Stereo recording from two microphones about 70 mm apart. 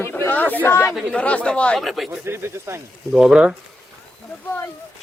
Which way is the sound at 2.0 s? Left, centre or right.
Right.